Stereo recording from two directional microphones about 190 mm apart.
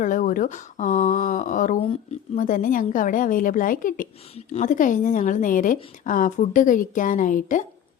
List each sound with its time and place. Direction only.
0.0 s a woman's voice: 45° left (ahead or behind)
1.8 s speech: 30° left (ahead or behind)
2.4 s a woman's voice: 45° left (ahead or behind)